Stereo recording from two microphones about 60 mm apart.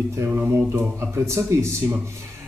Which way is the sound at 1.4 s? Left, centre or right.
Right.